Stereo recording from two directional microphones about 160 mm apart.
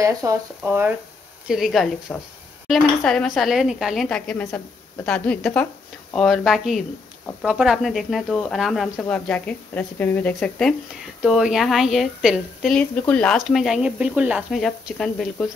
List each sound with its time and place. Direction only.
0.0 s speech: 20° right (ahead or behind)
1.5 s speech: centre (ahead or behind)
8.9 s speech: 10° left (ahead or behind)
11.2 s speech: 5° right (ahead or behind)